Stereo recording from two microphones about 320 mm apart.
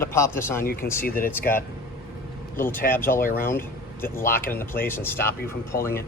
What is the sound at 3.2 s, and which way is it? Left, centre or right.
Speech, left.